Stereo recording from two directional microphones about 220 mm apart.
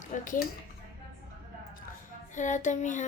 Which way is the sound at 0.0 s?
35° left (ahead or behind).